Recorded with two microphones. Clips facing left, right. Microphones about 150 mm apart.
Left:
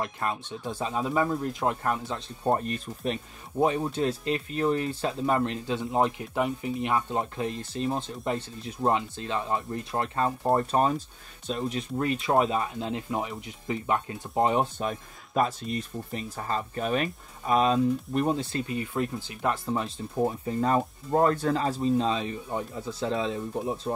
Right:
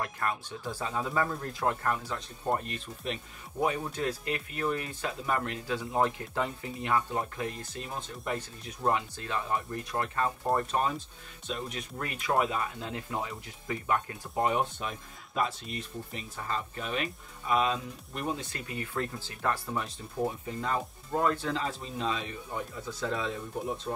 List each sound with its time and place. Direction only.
0.0 s speech: 20° left (ahead or behind)
20.4 s speech: 40° left (ahead or behind)